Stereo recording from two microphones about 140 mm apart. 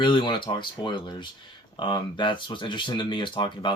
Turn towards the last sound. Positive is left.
turn(degrees=35)  # may be behind; listen again after turning